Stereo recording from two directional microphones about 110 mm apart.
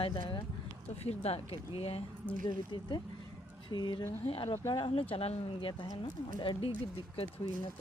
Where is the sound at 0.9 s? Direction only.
70° left (ahead or behind).